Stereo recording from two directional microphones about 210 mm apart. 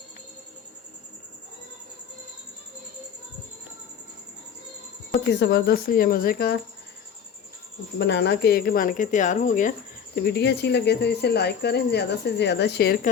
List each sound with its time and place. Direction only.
5.3 s speech: 50° left (ahead or behind)
7.9 s speech: 55° left (ahead or behind); by 9.7 s 35° left (ahead or behind)
10.2 s speech: 50° left (ahead or behind)